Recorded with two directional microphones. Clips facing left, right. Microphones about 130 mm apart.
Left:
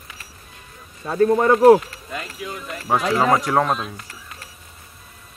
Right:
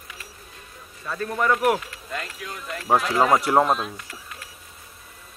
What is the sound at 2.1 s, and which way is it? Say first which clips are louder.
Speech: left 3 dB; 5° left (ahead or behind).